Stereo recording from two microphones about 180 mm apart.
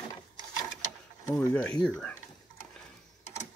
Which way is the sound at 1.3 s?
5° left (ahead or behind).